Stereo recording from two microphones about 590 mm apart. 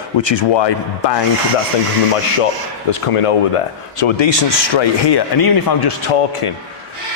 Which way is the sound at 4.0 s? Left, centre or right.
Left.